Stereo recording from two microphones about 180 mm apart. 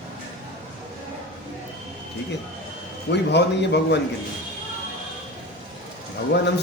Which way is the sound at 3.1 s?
70° left (ahead or behind).